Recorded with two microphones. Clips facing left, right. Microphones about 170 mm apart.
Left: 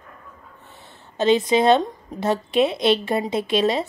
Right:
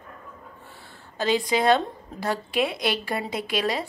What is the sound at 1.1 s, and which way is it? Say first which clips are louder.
Speech: left 6 dB; 20° left (ahead or behind).